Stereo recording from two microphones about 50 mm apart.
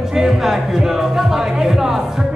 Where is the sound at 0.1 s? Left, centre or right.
Centre.